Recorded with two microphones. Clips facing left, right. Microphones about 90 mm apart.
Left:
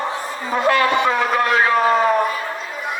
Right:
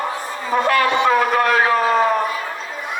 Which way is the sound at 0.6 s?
25° left (ahead or behind).